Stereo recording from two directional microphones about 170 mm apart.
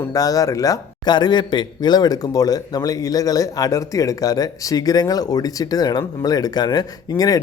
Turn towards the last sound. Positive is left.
turn(degrees=20)  # may be behind; listen again after turning